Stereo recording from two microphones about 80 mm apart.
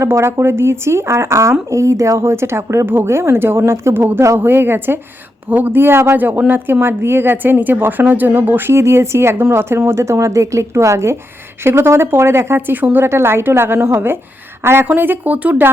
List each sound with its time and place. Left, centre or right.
0.0 s a woman's voice: right